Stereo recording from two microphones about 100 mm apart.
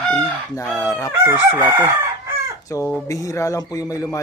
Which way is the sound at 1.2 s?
25° right (ahead or behind).